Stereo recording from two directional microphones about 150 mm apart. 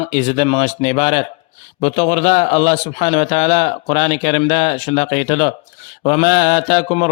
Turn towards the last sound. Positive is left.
turn(degrees=45)  # may be behind; listen again after turning